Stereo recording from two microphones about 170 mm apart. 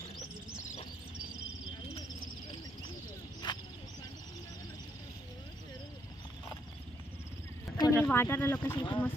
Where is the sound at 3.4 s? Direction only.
25° left (ahead or behind).